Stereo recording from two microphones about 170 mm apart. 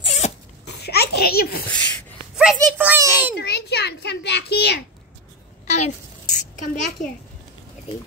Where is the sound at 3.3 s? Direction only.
80° left.